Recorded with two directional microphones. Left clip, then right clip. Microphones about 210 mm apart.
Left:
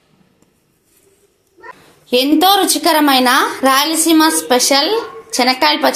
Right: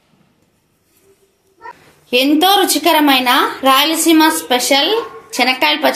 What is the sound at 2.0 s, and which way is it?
A woman's voice, 15° left (ahead or behind).